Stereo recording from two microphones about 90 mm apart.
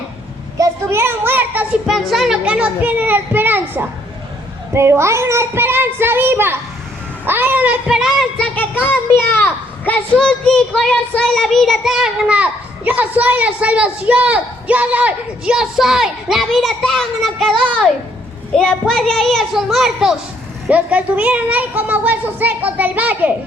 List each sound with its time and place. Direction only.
0.6 s a sound: 30° right (ahead or behind)
1.9 s a child's voice: centre (ahead or behind)
8.8 s a child's voice: 25° left (ahead or behind)
10.2 s a child's voice: 10° left (ahead or behind)
12.4 s a child's voice: 15° right (ahead or behind); by 17.5 s centre (ahead or behind)
18.5 s a child's voice: 5° left (ahead or behind)
20.7 s a child's voice: 15° right (ahead or behind)